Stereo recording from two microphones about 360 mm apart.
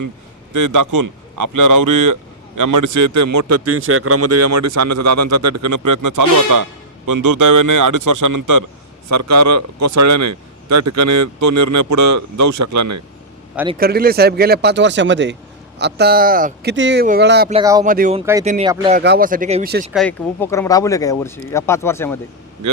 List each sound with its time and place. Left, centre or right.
0.5 s a man's voice: right
13.7 s speech: right
17.5 s speech: centre
17.8 s speech: right
18.9 s speech: right
19.9 s speech: centre